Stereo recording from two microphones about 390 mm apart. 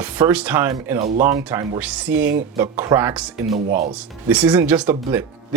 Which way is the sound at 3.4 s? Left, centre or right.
Centre.